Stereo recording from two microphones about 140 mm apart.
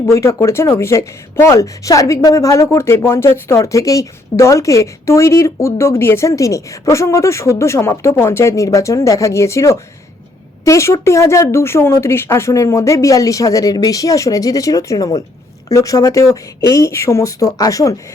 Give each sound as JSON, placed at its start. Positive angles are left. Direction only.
{"t": 0.0, "sound": "speech", "side_deg": 20}